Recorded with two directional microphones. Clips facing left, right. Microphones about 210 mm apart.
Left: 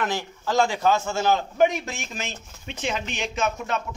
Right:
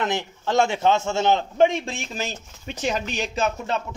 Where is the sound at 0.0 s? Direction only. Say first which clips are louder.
Right 2 dB; 25° right (ahead or behind).